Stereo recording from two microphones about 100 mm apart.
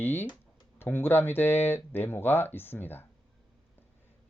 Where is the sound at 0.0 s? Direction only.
20° left (ahead or behind).